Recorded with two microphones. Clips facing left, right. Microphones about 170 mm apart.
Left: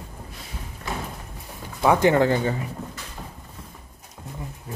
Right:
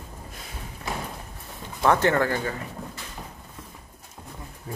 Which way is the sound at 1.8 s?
15° left (ahead or behind).